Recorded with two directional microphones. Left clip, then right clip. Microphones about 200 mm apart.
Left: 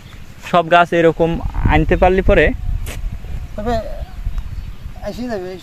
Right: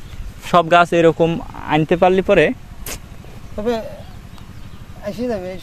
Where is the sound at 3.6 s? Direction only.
30° right (ahead or behind).